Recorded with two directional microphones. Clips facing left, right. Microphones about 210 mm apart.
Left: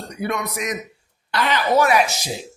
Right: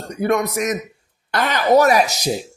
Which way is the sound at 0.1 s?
45° right (ahead or behind).